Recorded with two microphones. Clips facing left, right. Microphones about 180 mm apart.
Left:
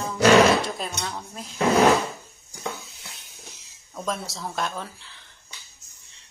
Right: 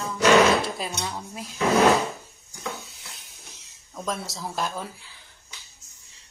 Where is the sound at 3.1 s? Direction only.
Centre (ahead or behind).